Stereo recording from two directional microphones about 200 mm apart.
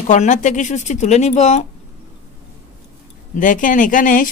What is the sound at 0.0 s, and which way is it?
A man's voice, 35° left (ahead or behind).